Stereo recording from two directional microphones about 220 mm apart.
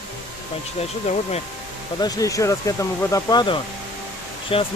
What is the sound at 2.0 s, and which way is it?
Speech, 15° left (ahead or behind).